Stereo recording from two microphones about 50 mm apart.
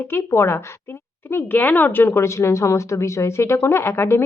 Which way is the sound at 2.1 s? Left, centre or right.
Left.